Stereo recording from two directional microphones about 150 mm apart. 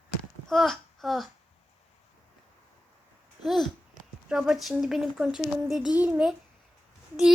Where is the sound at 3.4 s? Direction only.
Centre (ahead or behind).